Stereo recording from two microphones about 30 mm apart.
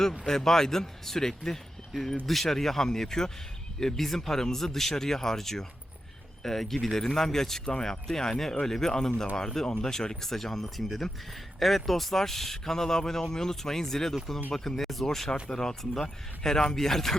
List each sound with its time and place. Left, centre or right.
0.3 s speech: centre
3.9 s speech: centre
7.6 s speech: left
10.2 s speech: centre